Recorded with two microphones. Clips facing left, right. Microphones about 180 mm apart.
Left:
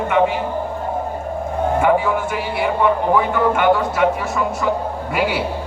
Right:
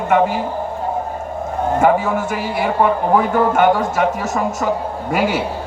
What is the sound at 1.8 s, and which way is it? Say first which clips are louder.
A man's voice: right 2 dB; 40° right (ahead or behind).